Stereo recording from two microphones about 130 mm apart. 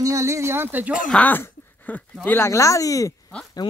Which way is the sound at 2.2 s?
20° left (ahead or behind).